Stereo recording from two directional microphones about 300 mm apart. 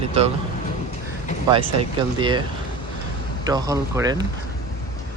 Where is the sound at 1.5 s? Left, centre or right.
Centre.